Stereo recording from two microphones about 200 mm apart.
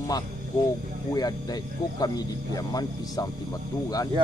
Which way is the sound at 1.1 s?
20° left (ahead or behind).